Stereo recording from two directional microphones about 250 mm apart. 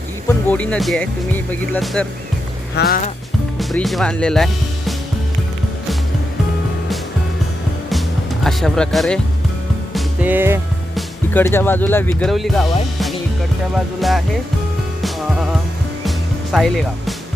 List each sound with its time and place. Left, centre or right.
0.3 s speech: centre
2.7 s speech: left
3.6 s speech: centre
8.4 s speech: centre
9.9 s music: centre
11.3 s speech: centre
13.7 s speech: centre
16.0 s music: centre